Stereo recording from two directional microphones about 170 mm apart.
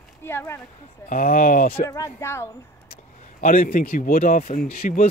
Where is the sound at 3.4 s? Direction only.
55° left (ahead or behind).